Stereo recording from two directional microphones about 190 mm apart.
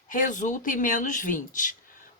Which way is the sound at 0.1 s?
45° left (ahead or behind).